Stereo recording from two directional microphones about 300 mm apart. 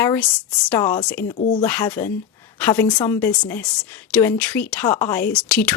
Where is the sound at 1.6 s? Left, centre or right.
Centre.